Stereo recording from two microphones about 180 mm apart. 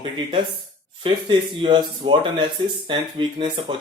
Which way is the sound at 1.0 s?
25° right (ahead or behind).